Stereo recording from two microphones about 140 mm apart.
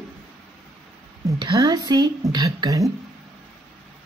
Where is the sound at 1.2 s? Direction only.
30° right (ahead or behind).